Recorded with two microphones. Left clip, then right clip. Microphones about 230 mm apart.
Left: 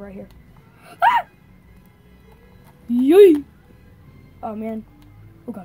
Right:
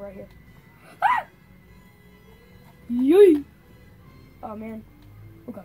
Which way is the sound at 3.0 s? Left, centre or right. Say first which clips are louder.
Left 4 dB; left.